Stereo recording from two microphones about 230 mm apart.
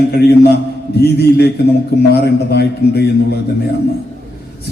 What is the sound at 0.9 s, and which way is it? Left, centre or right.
A man's voice, left.